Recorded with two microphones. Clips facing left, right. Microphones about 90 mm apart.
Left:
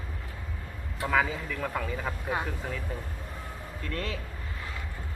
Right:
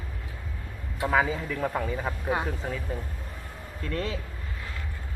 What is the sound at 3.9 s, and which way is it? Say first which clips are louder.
Speech: right 4 dB; 30° right (ahead or behind).